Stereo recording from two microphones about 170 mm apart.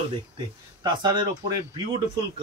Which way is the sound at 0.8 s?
25° right (ahead or behind).